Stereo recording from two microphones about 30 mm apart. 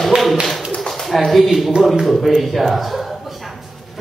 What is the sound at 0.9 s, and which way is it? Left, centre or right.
Bird, centre.